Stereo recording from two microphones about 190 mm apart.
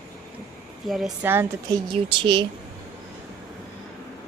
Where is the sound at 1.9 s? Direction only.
25° right (ahead or behind).